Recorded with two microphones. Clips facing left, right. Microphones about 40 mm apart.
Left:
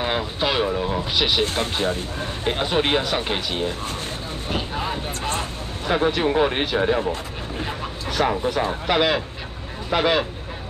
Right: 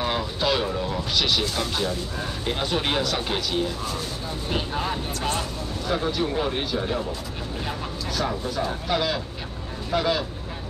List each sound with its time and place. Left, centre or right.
0.0 s vehicle: left
1.4 s speech: left
2.5 s speech: left
4.5 s speech: centre
5.9 s speech: left